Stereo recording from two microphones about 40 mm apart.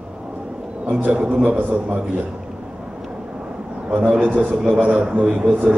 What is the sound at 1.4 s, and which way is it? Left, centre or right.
Speech, right.